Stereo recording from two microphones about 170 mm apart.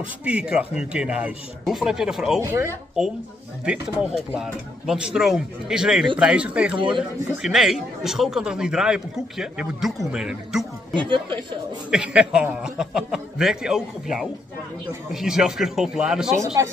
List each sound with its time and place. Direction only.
0.2 s a man's voice: 5° right (ahead or behind)
2.4 s a man's voice: 15° right (ahead or behind)
3.0 s a man's voice: 5° right (ahead or behind)
4.4 s a man's voice: 5° right (ahead or behind)
6.7 s speech: 30° right (ahead or behind)
7.0 s a man's voice: centre (ahead or behind)
11.0 s speech: 30° right (ahead or behind)
11.9 s a man's voice: 5° right (ahead or behind)